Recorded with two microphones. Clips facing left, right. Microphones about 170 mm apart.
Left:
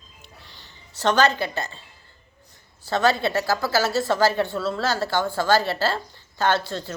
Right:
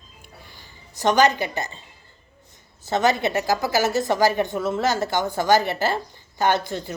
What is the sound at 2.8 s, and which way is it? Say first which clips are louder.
Speech: even; 20° right (ahead or behind).